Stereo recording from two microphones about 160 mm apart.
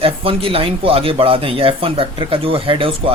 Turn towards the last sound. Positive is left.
turn(degrees=-35)  # may be behind; listen again after turning